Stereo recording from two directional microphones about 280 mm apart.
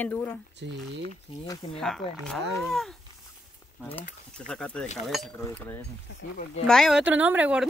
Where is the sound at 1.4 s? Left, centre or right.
Centre.